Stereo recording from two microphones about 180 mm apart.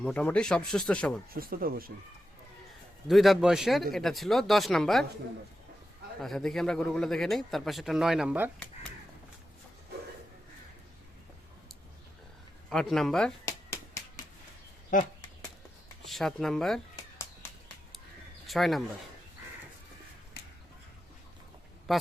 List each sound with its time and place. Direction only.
0.0 s speech: 5° left (ahead or behind)
1.3 s speech: 55° right (ahead or behind)
3.1 s speech: centre (ahead or behind)
6.2 s speech: 5° left (ahead or behind)
12.7 s speech: 5° left (ahead or behind)
16.0 s speech: centre (ahead or behind)
18.4 s speech: centre (ahead or behind)
20.4 s a sound: 65° left (ahead or behind)
21.9 s speech: centre (ahead or behind)